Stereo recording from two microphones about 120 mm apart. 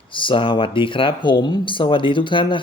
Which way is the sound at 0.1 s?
45° left (ahead or behind).